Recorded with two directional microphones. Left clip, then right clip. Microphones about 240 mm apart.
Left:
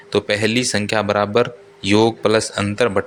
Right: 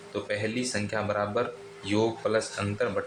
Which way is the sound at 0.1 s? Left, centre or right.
Left.